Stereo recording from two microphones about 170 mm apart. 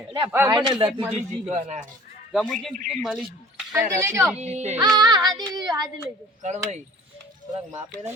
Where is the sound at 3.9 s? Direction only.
15° right (ahead or behind).